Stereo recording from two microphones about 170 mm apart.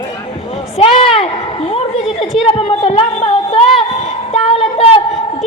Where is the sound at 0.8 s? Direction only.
35° left (ahead or behind).